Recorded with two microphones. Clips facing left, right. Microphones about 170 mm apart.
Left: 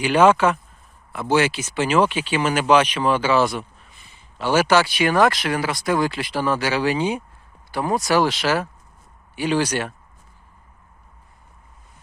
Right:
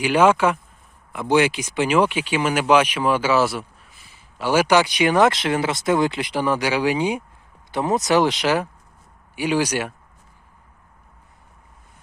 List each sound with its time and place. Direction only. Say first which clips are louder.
0.0 s speech: left 1 dB; 10° right (ahead or behind)